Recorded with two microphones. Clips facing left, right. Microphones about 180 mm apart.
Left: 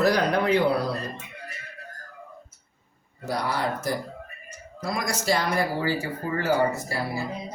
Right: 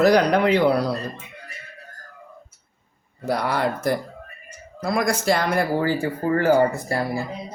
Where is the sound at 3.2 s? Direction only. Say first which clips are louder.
Right 5 dB; 60° right (ahead or behind).